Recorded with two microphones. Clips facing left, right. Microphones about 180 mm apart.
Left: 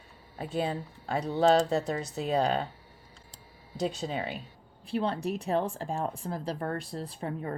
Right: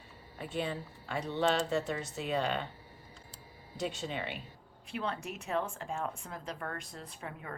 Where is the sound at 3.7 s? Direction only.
35° left (ahead or behind).